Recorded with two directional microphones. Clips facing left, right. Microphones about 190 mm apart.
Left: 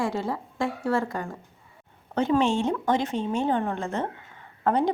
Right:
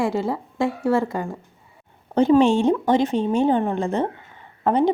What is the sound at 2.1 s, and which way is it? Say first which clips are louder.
Speech: right 7 dB; 30° right (ahead or behind).